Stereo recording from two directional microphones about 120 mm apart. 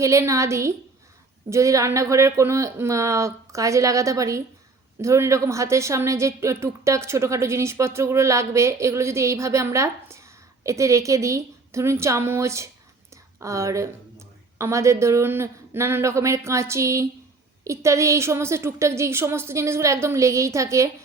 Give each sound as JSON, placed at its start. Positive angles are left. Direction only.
{"t": 0.0, "sound": "a woman's voice", "side_deg": -25}